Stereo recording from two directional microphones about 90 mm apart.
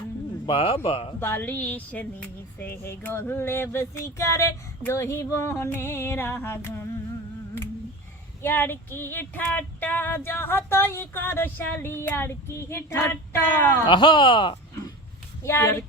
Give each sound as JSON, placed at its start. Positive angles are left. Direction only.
{"t": 0.4, "sound": "speech", "side_deg": 90}
{"t": 1.2, "sound": "female singing", "side_deg": 20}
{"t": 4.9, "sound": "a sound", "side_deg": 30}
{"t": 5.6, "sound": "female singing", "side_deg": 25}
{"t": 8.4, "sound": "female singing", "side_deg": 25}
{"t": 13.8, "sound": "speech", "side_deg": 65}
{"t": 15.4, "sound": "female singing", "side_deg": 25}